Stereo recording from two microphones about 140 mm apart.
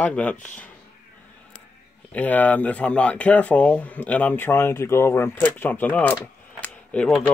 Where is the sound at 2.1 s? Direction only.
10° left (ahead or behind).